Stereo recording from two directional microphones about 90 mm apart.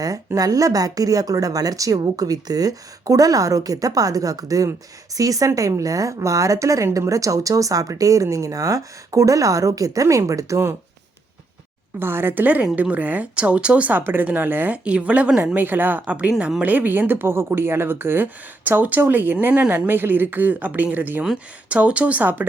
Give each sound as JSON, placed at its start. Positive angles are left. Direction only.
{"t": 0.3, "sound": "speech", "side_deg": -45}
{"t": 11.9, "sound": "speech", "side_deg": -25}
{"t": 15.5, "sound": "speech", "side_deg": -20}